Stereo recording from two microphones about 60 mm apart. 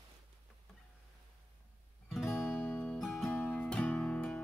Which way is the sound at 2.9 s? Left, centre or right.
Centre.